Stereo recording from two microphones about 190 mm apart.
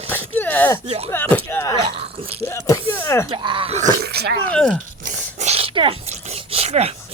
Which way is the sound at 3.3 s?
25° right (ahead or behind).